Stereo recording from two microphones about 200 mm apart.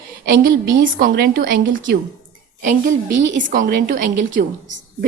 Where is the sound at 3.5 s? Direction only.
45° right (ahead or behind).